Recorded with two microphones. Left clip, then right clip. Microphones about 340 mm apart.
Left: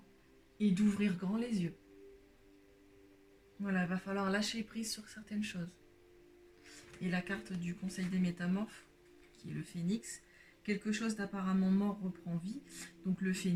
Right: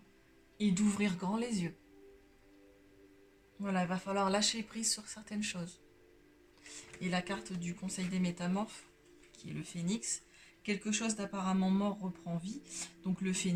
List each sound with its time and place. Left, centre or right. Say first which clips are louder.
0.6 s speech: right 1 dB; centre
3.6 s speech: right 2 dB; centre
7.0 s speech: right 2 dB; centre